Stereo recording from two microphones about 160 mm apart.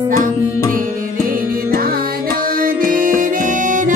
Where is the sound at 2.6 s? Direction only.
60° right (ahead or behind).